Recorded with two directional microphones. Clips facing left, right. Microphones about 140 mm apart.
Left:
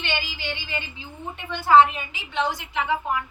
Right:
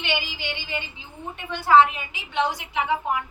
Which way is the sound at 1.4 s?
5° right (ahead or behind).